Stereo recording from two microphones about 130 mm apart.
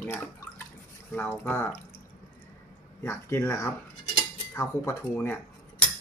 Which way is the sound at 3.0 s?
20° left (ahead or behind).